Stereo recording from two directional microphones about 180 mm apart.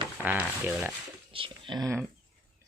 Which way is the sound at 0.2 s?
10° right (ahead or behind).